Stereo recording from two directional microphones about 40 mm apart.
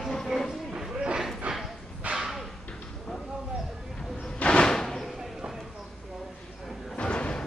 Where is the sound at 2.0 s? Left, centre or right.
Right.